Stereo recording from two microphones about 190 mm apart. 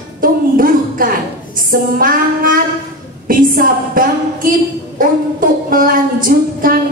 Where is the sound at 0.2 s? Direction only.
45° right (ahead or behind).